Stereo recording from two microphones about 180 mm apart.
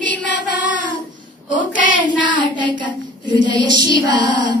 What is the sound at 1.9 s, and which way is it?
Child singing, 25° right (ahead or behind).